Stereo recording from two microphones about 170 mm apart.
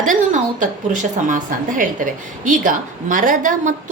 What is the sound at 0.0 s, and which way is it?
A woman's voice, 50° right (ahead or behind).